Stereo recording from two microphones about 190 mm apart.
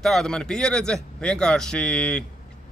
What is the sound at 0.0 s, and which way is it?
Speech, centre (ahead or behind).